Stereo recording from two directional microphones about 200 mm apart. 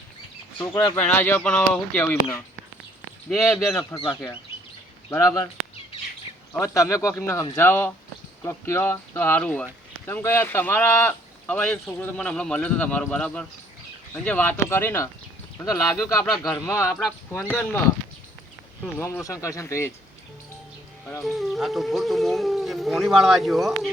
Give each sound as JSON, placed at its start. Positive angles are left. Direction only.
{"t": 0.9, "sound": "speech", "side_deg": 10}
{"t": 3.2, "sound": "speech", "side_deg": 0}
{"t": 3.9, "sound": "speech", "side_deg": 20}
{"t": 6.5, "sound": "speech", "side_deg": 15}
{"t": 15.6, "sound": "speech", "side_deg": 0}
{"t": 16.0, "sound": "speech", "side_deg": 15}
{"t": 18.9, "sound": "speech", "side_deg": 10}
{"t": 21.2, "sound": "speech", "side_deg": 0}